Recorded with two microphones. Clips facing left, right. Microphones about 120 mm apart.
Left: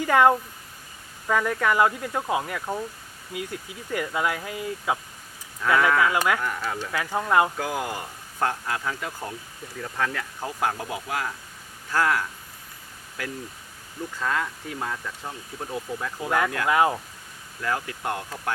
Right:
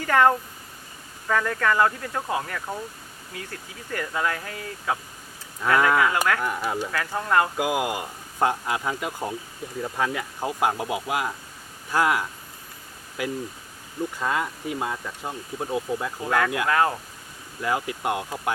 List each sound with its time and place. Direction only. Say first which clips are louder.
0.0 s speech: left 1 dB; 15° left (ahead or behind)
5.6 s speech: right 1 dB; 15° right (ahead or behind)
6.9 s speech: left 2 dB; 10° left (ahead or behind)
7.5 s speech: right 4 dB; 15° right (ahead or behind)
16.2 s speech: even; 10° left (ahead or behind)
17.6 s speech: right 3 dB; 15° right (ahead or behind)